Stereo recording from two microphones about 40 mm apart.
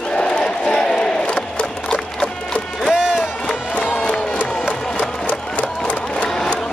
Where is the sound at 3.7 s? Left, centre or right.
Left.